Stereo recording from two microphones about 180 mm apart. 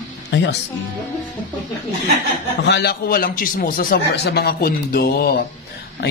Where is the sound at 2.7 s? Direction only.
65° left (ahead or behind).